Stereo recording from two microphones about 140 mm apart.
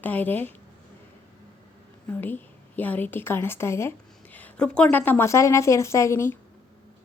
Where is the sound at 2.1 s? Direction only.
15° left (ahead or behind).